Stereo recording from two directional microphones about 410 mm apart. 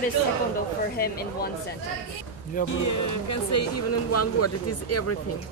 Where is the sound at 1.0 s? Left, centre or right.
Left.